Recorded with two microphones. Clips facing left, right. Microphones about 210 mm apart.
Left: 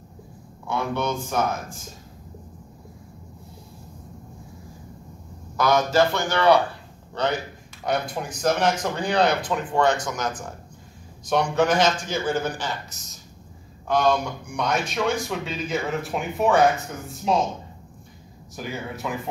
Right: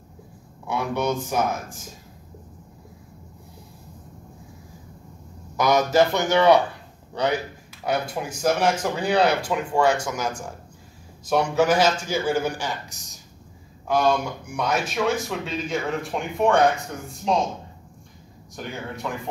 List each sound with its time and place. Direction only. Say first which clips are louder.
0.7 s speech: right 1 dB; 15° right (ahead or behind)
5.6 s a man's voice: right 1 dB; 15° right (ahead or behind)
13.8 s speech: even; 5° right (ahead or behind)
18.6 s speech: left 1 dB; 5° left (ahead or behind)